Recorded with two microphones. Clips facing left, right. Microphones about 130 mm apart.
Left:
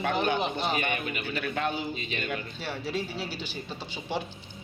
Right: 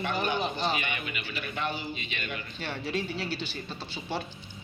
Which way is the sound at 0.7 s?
45° left (ahead or behind).